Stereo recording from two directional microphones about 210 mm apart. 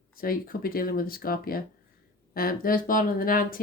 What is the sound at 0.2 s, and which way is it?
Speech, 45° left (ahead or behind).